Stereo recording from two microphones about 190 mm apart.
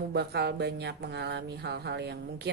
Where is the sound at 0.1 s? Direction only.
60° right (ahead or behind).